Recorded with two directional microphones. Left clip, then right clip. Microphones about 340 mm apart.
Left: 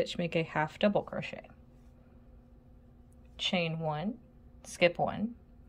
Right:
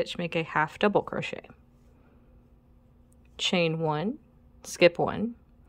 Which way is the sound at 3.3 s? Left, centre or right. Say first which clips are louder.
Right 6 dB; centre.